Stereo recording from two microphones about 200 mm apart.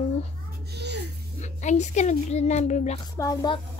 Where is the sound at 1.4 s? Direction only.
35° left (ahead or behind).